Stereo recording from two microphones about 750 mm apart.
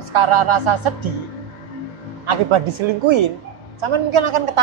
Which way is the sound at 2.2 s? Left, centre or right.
Right.